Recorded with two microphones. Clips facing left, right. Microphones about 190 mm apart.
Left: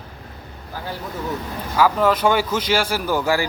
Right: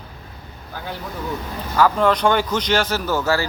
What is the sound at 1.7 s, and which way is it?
Speech, 5° left (ahead or behind).